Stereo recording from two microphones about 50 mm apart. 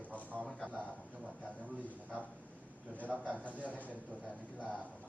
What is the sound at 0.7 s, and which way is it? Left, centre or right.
A man's voice, right.